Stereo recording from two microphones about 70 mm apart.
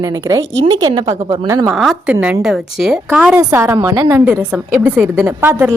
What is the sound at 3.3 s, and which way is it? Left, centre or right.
Speech, right.